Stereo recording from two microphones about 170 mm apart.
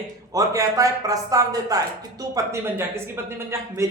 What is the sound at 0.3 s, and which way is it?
A man's voice, 20° right (ahead or behind).